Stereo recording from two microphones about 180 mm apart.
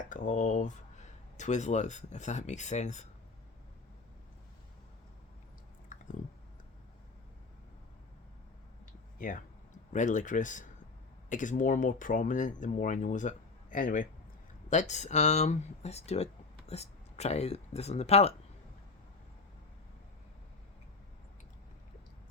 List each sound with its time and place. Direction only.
0.0 s speech: 45° left (ahead or behind)
5.9 s chewing: 45° left (ahead or behind)
9.1 s speech: 50° left (ahead or behind)